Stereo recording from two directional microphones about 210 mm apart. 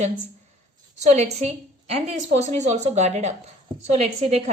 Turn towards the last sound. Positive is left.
turn(degrees=-30)  # may be behind; listen again after turning